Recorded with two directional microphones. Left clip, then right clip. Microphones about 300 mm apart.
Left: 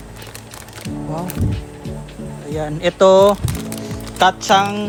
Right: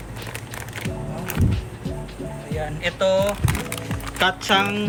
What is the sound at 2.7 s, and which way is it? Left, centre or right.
Speech, centre.